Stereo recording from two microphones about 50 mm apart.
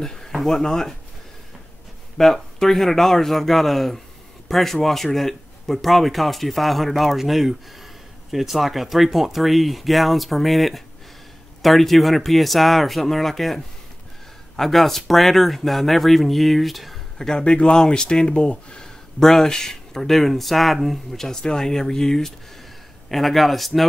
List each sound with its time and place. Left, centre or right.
0.0 s a sound: centre
0.3 s a sound: centre
0.6 s speech: centre
2.1 s speech: centre
14.6 s speech: centre
17.4 s speech: left
19.1 s speech: centre